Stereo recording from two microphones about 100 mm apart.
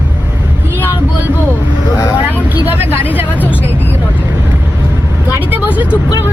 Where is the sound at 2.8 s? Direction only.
20° right (ahead or behind).